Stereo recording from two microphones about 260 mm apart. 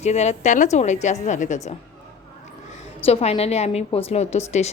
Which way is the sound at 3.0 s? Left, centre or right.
Left.